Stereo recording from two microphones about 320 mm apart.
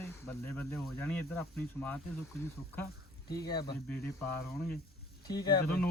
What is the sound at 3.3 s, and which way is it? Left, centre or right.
Speech, centre.